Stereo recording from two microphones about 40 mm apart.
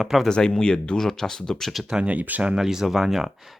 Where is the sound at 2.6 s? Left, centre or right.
Centre.